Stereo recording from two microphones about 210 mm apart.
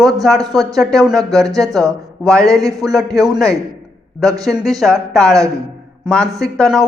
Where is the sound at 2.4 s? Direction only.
15° right (ahead or behind).